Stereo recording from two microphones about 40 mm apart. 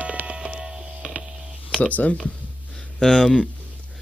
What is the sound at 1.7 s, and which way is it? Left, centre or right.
Speech, left.